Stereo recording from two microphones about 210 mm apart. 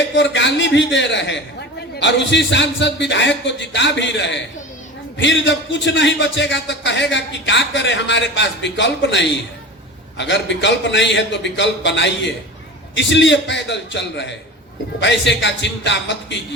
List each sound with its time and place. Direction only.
0.1 s a man's voice: 55° left (ahead or behind)